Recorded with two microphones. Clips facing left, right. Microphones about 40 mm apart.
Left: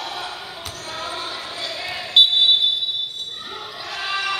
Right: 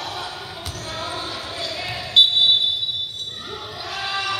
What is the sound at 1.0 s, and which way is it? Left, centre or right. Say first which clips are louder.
Basketball bounce: even; centre.